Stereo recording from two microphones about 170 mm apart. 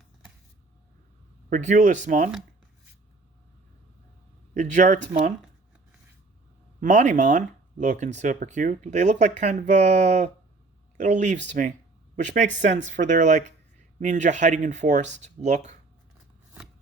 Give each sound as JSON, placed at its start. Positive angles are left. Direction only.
{"t": 1.5, "sound": "speech", "side_deg": -50}
{"t": 4.5, "sound": "speech", "side_deg": -45}
{"t": 6.7, "sound": "speech", "side_deg": -45}